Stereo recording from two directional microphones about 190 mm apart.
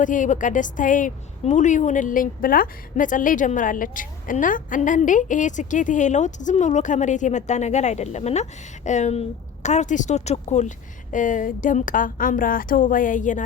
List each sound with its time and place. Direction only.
0.0 s a woman's voice: 40° left (ahead or behind)